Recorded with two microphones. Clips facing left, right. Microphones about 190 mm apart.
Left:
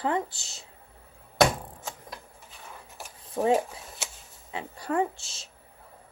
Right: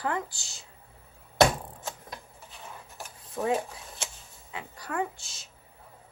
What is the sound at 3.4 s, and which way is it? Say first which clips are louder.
A woman's voice: left 4 dB; 30° left (ahead or behind).